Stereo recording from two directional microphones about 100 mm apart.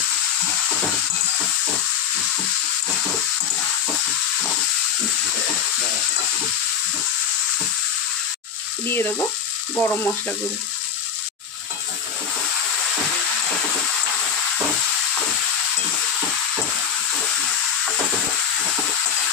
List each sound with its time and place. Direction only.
8.8 s frying: 20° left (ahead or behind)
9.8 s speech: 15° left (ahead or behind)